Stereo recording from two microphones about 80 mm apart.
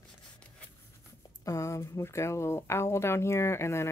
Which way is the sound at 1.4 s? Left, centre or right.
Left.